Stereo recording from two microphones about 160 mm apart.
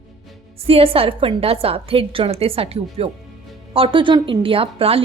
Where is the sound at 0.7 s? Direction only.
35° right (ahead or behind).